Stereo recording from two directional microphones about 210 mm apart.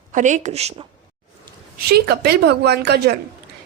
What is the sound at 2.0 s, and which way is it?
Speech, 50° right (ahead or behind).